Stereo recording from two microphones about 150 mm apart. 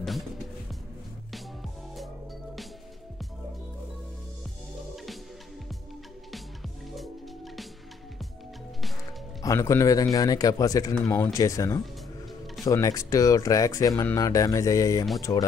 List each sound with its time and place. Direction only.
9.4 s speech: 20° left (ahead or behind)